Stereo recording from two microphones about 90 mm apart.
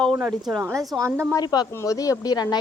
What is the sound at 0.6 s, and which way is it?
Speech, 30° right (ahead or behind).